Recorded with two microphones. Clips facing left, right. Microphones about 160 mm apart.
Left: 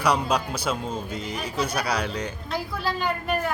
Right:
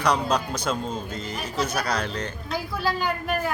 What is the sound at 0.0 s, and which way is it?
A man's voice, 10° left (ahead or behind).